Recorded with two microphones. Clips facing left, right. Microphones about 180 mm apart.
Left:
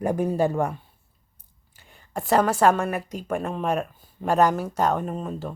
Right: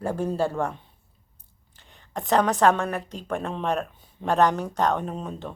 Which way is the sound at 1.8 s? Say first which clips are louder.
Left 2 dB; 5° left (ahead or behind).